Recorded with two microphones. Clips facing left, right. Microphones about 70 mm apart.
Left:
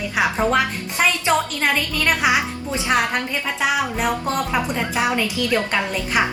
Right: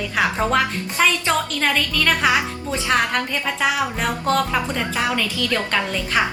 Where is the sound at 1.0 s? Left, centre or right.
Centre.